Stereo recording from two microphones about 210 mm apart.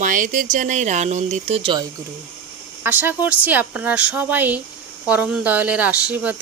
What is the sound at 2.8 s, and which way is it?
Speech, 10° right (ahead or behind).